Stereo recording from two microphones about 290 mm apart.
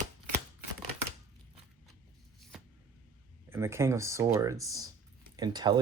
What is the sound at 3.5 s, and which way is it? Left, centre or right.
Speech, centre.